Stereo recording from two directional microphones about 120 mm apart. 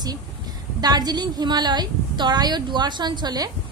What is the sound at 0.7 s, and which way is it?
A woman's voice, 35° right (ahead or behind).